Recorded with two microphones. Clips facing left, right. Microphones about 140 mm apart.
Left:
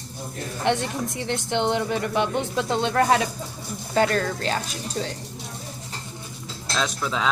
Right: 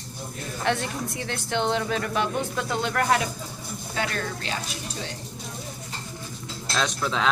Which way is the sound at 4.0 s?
40° left (ahead or behind).